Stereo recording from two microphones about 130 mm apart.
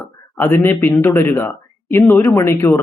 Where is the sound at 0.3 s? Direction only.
15° left (ahead or behind).